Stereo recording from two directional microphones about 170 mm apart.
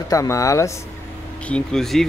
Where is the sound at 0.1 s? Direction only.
20° left (ahead or behind).